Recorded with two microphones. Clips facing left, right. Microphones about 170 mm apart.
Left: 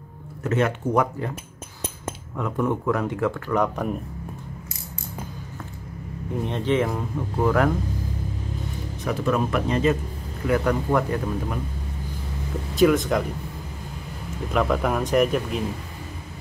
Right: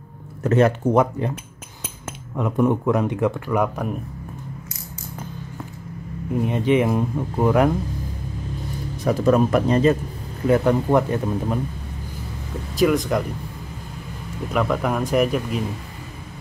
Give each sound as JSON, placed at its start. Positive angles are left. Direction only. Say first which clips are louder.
{"t": 0.4, "sound": "speech", "louder": "right 6 dB", "side_deg": -35}
{"t": 2.3, "sound": "speech", "louder": "right 5 dB", "side_deg": -20}
{"t": 6.4, "sound": "speech", "louder": "right 4 dB", "side_deg": -10}
{"t": 9.0, "sound": "speech", "louder": "right 6 dB", "side_deg": -40}
{"t": 10.4, "sound": "speech", "louder": "right 4 dB", "side_deg": -25}
{"t": 12.7, "sound": "speech", "louder": "even", "side_deg": 0}
{"t": 14.5, "sound": "speech", "louder": "right 1 dB", "side_deg": 0}